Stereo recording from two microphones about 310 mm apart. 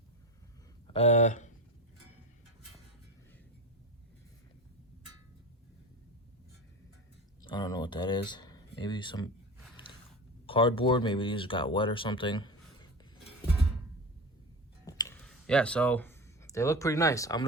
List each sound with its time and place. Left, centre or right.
0.9 s speech: left
7.4 s speech: centre
10.4 s speech: centre
14.8 s a sound: centre